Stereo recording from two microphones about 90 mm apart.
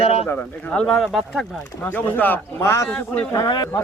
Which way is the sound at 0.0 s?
90° left.